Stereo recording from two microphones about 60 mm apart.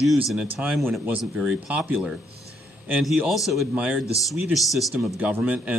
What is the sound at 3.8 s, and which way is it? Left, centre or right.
Speech, right.